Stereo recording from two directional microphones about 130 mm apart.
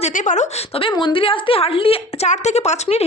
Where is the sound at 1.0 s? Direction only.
40° left (ahead or behind).